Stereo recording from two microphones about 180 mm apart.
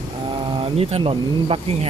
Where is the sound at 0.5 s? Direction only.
30° right (ahead or behind).